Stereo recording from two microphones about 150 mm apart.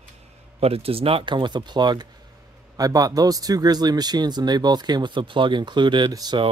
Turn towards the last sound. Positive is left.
turn(degrees=-30)  # may be behind; listen again after turning